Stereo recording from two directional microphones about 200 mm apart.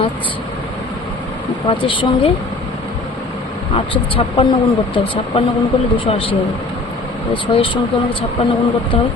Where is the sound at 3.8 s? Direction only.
25° left (ahead or behind).